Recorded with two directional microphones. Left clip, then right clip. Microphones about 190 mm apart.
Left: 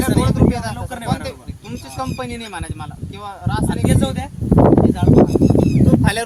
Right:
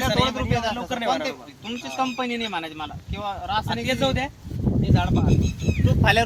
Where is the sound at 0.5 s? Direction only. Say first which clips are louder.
Right 1 dB; 15° right (ahead or behind).